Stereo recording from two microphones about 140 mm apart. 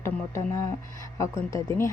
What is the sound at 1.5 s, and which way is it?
Speech, 20° left (ahead or behind).